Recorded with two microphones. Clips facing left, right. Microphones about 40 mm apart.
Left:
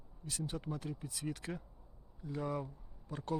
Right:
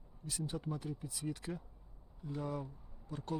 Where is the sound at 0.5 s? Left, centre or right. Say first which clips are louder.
Even; left.